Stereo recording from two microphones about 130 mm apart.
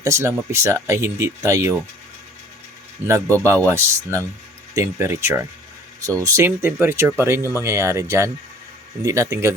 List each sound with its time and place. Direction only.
0.0 s speech: 20° right (ahead or behind)
3.1 s speech: 25° right (ahead or behind)